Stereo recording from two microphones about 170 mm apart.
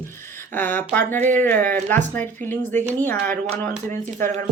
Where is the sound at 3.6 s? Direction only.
50° right (ahead or behind).